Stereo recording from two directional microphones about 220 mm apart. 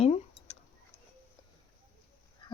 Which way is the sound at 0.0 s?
30° left (ahead or behind).